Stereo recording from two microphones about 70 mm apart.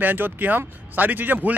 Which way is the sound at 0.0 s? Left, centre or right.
Right.